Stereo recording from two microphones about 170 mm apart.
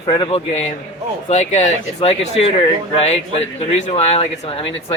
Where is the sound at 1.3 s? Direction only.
45° left (ahead or behind).